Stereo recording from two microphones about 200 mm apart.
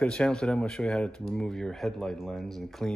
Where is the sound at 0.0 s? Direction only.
5° left (ahead or behind).